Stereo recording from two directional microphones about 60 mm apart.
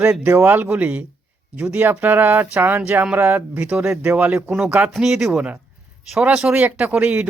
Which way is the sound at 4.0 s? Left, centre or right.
Right.